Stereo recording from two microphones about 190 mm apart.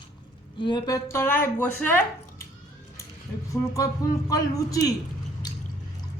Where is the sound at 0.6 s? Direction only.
20° left (ahead or behind).